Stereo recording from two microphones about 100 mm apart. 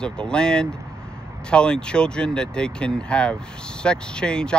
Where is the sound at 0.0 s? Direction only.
10° left (ahead or behind).